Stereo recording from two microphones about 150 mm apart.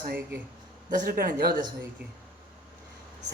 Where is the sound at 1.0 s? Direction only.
75° right (ahead or behind).